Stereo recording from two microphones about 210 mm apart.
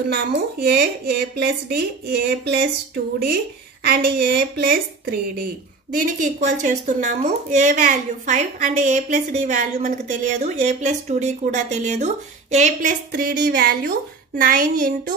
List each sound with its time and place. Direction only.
0.1 s speech: 50° right (ahead or behind)
3.8 s a woman's voice: 45° right (ahead or behind)